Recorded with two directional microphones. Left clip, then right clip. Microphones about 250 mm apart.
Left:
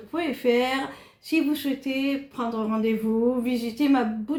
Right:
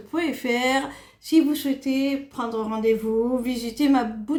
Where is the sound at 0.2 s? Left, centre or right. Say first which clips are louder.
Left 2 dB; right.